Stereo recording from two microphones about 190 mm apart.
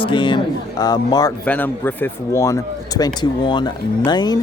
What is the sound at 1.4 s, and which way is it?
Speech, 10° left (ahead or behind).